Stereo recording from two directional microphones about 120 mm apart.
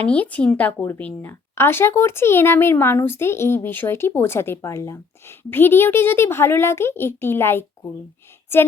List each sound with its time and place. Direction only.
0.0 s speech: 10° left (ahead or behind)